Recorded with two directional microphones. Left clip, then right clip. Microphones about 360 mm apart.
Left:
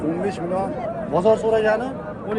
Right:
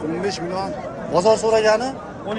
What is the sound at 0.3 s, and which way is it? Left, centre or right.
A man's voice, centre.